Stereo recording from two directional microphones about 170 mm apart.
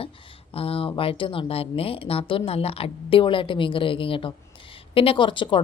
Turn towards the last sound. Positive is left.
turn(degrees=30)  # may be behind; listen again after turning